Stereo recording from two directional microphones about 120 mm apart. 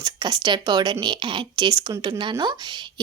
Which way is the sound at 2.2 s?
40° right (ahead or behind).